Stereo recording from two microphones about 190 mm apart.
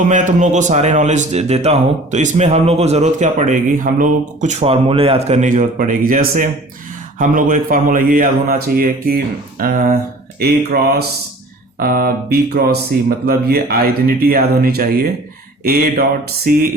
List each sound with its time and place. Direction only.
0.1 s a man's voice: 40° right (ahead or behind)